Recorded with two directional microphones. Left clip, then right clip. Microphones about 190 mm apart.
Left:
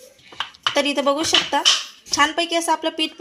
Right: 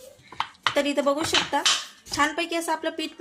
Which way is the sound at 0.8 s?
30° left (ahead or behind).